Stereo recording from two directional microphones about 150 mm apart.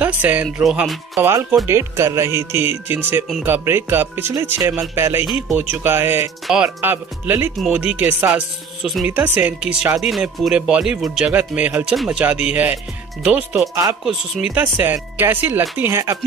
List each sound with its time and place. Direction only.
0.0 s speech: 10° right (ahead or behind)
1.1 s speech: 15° right (ahead or behind)
5.2 s speech: 5° right (ahead or behind)